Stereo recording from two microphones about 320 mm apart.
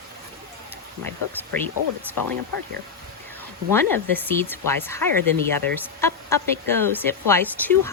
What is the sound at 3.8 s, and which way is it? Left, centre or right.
Speech, centre.